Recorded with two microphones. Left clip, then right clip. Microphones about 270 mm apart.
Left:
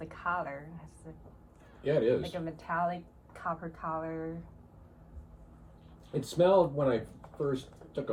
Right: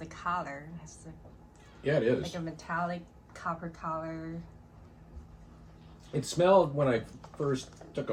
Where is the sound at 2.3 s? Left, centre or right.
Centre.